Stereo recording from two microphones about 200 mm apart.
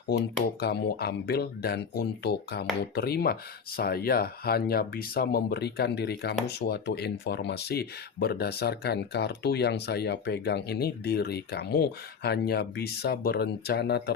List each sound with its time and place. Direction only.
0.6 s speech: 55° left (ahead or behind)